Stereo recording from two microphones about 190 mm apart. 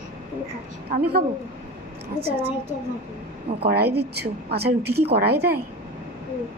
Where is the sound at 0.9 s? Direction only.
50° right (ahead or behind).